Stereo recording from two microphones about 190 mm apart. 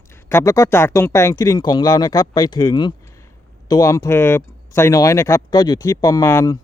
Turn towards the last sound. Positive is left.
turn(degrees=15)  # may be behind; listen again after turning